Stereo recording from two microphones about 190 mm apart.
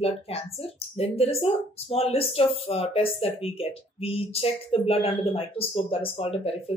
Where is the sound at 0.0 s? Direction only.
30° left (ahead or behind).